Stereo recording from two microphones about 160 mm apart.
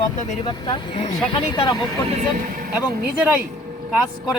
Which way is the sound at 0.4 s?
30° left (ahead or behind).